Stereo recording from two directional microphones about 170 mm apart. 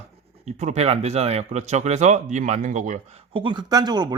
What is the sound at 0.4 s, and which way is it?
Speech, 45° right (ahead or behind).